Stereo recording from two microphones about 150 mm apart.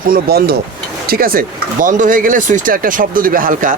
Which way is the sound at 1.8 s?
65° right (ahead or behind).